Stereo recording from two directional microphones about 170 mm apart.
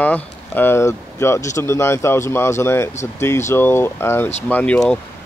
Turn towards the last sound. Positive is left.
turn(degrees=5)  # may be behind; listen again after turning